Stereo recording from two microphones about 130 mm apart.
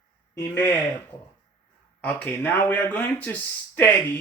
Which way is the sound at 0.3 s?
15° left (ahead or behind).